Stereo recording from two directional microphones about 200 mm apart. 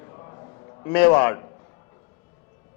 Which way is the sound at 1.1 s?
15° left (ahead or behind).